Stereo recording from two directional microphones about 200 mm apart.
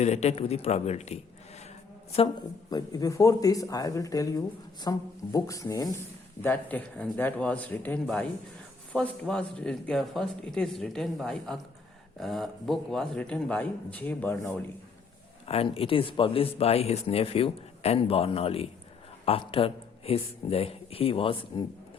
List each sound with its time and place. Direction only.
0.0 s a man's voice: 35° left (ahead or behind)
2.1 s speech: 25° left (ahead or behind); by 14.7 s 5° left (ahead or behind)
15.4 s speech: 30° left (ahead or behind)